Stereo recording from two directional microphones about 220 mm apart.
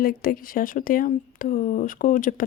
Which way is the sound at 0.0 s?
40° left (ahead or behind).